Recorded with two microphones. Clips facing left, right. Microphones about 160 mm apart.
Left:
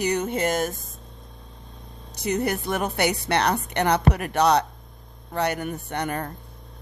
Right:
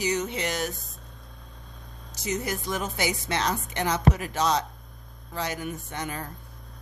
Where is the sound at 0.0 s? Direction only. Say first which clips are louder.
Left 4 dB; 55° left (ahead or behind).